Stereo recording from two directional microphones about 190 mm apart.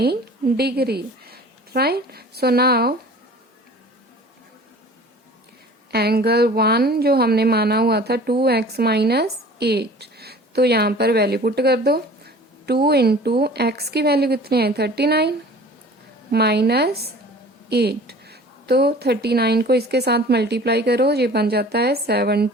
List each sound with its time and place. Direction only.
0.0 s a woman's voice: 55° right (ahead or behind)
5.9 s a woman's voice: 55° right (ahead or behind)